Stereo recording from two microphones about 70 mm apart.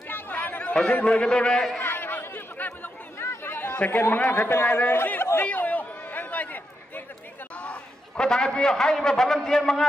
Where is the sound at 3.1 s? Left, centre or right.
Left.